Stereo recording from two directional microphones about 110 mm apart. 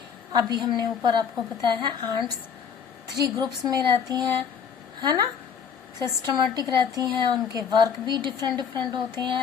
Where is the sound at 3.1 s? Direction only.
35° right (ahead or behind).